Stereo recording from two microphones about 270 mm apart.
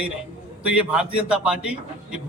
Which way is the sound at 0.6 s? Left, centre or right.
Centre.